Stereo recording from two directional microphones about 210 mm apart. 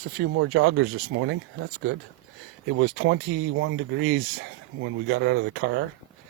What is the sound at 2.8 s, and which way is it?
Speech, 60° right (ahead or behind).